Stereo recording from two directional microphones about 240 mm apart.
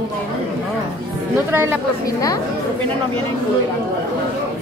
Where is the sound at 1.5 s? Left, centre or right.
Centre.